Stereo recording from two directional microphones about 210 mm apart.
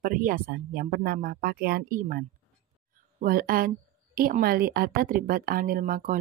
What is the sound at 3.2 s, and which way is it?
Speech, 45° right (ahead or behind).